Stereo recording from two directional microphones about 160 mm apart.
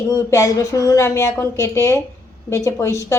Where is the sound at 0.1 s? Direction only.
20° left (ahead or behind).